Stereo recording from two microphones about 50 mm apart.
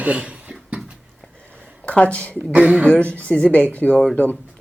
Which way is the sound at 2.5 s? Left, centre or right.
Right.